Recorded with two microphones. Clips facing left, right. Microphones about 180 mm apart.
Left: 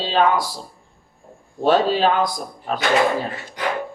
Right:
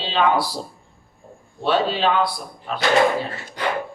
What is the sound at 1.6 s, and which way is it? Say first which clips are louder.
Speech: left 3 dB; 40° left (ahead or behind).